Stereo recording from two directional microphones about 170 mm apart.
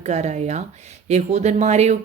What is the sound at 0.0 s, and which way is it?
Speech, 40° right (ahead or behind).